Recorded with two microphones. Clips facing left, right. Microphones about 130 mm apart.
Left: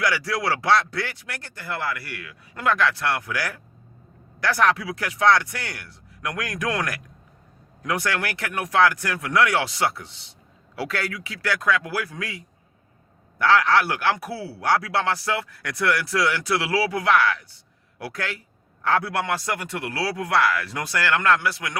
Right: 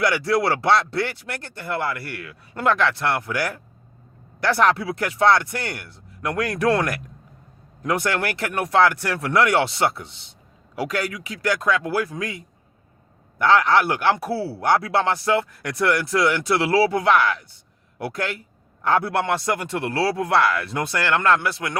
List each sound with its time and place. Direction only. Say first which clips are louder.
0.0 s a man's voice: right 4 dB; 25° right (ahead or behind)
13.4 s a man's voice: right 2 dB; 20° right (ahead or behind)